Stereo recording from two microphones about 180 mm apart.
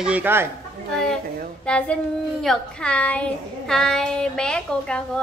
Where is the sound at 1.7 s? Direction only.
5° left (ahead or behind).